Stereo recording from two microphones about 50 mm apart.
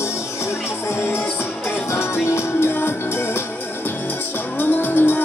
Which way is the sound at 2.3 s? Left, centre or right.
Left.